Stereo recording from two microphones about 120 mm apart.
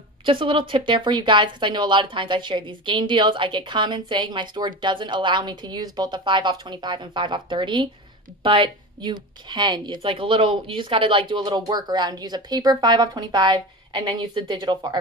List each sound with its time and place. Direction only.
0.2 s speech: 45° right (ahead or behind)